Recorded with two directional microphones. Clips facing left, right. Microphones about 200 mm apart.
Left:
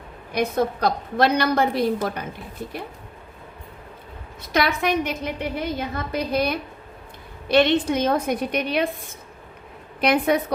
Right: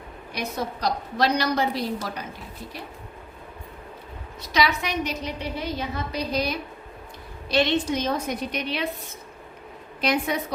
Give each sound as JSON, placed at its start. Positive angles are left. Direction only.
{"t": 0.3, "sound": "a woman's voice", "side_deg": 55}
{"t": 4.5, "sound": "a woman's voice", "side_deg": 55}
{"t": 10.0, "sound": "a woman's voice", "side_deg": 55}